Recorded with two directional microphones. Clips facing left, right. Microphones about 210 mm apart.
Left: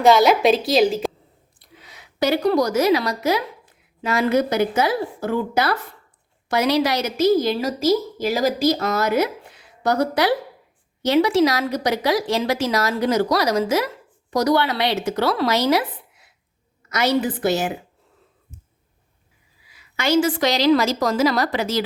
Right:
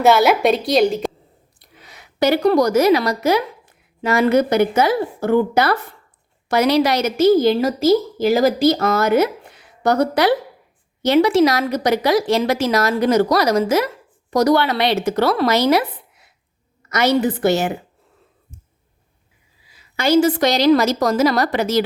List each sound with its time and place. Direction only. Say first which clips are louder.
0.0 s a woman's voice: right 1 dB; 5° right (ahead or behind)
1.9 s a woman's voice: right 3 dB; 60° right (ahead or behind)
16.9 s a woman's voice: right 3 dB; 55° right (ahead or behind)
19.7 s a woman's voice: right 4 dB; 35° right (ahead or behind)